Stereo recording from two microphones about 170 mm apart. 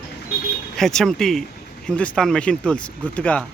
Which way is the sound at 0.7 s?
Centre (ahead or behind).